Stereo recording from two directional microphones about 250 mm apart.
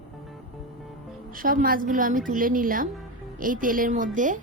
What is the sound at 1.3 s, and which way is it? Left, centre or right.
A woman's voice, right.